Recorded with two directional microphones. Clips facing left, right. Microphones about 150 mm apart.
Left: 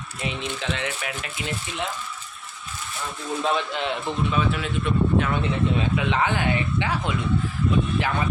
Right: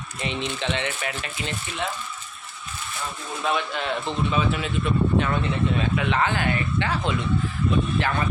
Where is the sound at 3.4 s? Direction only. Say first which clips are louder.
Even; 25° left (ahead or behind).